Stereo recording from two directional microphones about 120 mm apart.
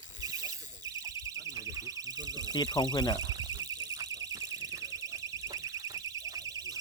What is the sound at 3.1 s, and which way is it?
Alarm, 35° right (ahead or behind).